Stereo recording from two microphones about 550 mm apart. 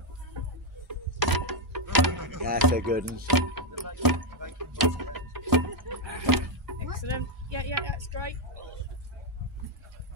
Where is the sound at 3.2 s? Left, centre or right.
Right.